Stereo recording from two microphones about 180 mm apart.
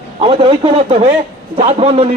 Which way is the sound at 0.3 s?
30° right (ahead or behind).